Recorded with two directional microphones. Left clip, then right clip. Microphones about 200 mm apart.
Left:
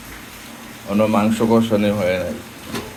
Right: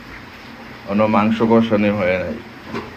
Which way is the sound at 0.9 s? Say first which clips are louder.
Right 1 dB; 15° left (ahead or behind).